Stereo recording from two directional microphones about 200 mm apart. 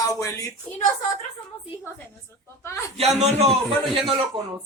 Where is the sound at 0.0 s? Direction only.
15° left (ahead or behind).